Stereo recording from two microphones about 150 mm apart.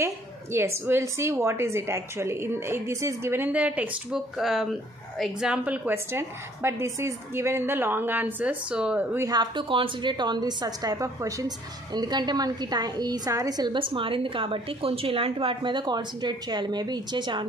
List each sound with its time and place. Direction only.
0.0 s a woman's voice: 15° right (ahead or behind)
9.3 s a woman's voice: 30° right (ahead or behind)